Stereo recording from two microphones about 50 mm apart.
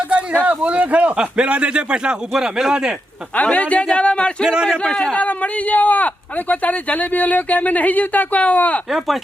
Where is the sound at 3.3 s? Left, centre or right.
Left.